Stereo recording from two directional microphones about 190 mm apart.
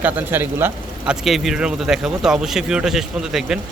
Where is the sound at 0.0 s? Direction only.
10° right (ahead or behind).